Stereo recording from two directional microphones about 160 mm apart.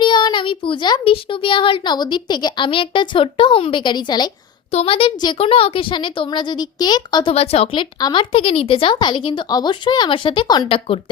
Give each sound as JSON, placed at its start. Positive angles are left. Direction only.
{"t": 0.0, "sound": "a child's voice", "side_deg": 30}
{"t": 4.7, "sound": "a woman's voice", "side_deg": 40}
{"t": 7.3, "sound": "a woman's voice", "side_deg": 40}